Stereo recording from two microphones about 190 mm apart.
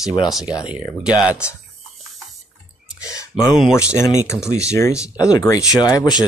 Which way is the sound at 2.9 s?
15° left (ahead or behind).